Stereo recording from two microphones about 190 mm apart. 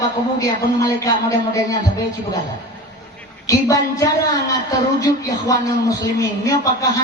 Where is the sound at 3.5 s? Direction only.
20° left (ahead or behind).